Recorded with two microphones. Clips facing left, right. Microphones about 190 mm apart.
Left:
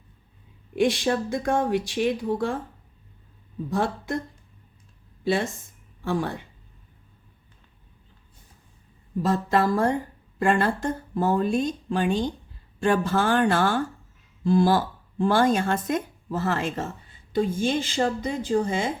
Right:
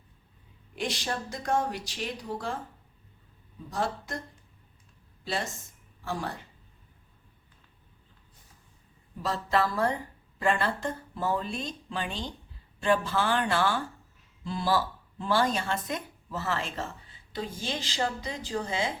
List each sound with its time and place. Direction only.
0.8 s speech: 55° left (ahead or behind)
3.7 s speech: 55° left (ahead or behind)
5.2 s speech: 60° left (ahead or behind)
9.2 s a woman's voice: 50° left (ahead or behind)